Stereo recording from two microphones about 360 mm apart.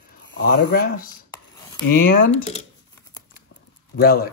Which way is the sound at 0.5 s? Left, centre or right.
Left.